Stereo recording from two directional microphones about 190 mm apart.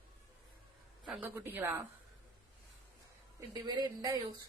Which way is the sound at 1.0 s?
5° right (ahead or behind).